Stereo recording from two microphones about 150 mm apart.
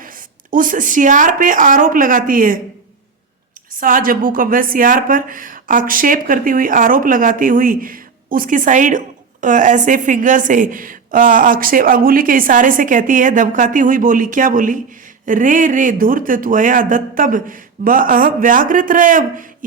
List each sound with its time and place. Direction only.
0.0 s speech: 65° right (ahead or behind)
3.8 s a woman's voice: 65° right (ahead or behind)